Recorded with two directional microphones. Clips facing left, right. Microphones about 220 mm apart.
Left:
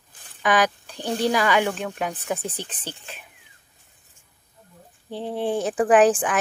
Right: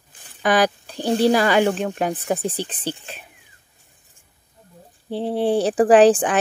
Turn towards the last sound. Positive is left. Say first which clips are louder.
# right 4 dB
turn(degrees=-30)  # may be behind; listen again after turning